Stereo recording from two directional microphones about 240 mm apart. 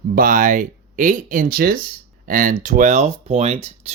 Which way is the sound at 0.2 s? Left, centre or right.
Right.